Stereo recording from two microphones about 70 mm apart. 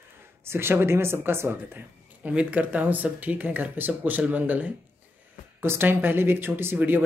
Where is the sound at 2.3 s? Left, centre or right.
Centre.